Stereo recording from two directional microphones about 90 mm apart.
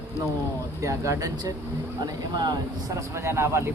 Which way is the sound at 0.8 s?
35° right (ahead or behind).